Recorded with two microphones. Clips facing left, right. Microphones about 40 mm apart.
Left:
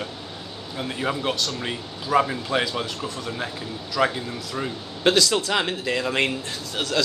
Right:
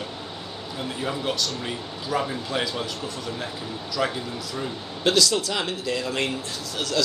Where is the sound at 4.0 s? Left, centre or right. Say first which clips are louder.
Left 4 dB; left.